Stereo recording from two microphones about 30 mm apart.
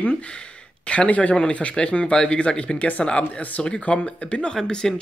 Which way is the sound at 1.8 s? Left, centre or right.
Left.